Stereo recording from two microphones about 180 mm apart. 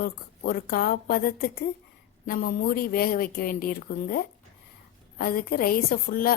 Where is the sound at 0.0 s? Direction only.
55° left (ahead or behind).